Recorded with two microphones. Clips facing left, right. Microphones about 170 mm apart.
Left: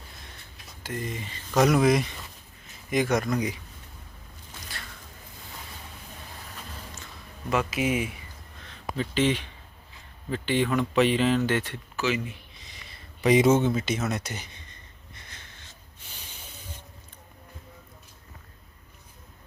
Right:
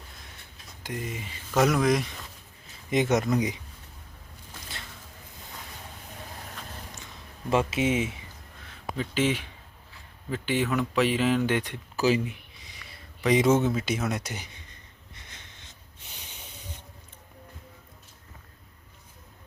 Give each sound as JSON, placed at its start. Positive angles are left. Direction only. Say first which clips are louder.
{"t": 0.8, "sound": "speech", "louder": "left 1 dB", "side_deg": -15}
{"t": 1.7, "sound": "speech", "louder": "left 3 dB", "side_deg": 5}
{"t": 2.9, "sound": "speech", "louder": "right 1 dB", "side_deg": -25}
{"t": 7.5, "sound": "speech", "louder": "right 1 dB", "side_deg": -25}
{"t": 9.0, "sound": "speech", "louder": "left 2 dB", "side_deg": -10}
{"t": 11.9, "sound": "speech", "louder": "right 4 dB", "side_deg": -35}
{"t": 13.2, "sound": "speech", "louder": "left 2 dB", "side_deg": 5}